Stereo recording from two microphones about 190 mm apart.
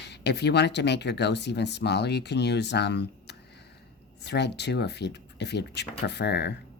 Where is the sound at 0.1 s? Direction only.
60° left (ahead or behind).